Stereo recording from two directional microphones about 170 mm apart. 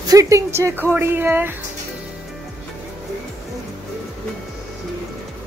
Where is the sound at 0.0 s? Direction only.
20° right (ahead or behind).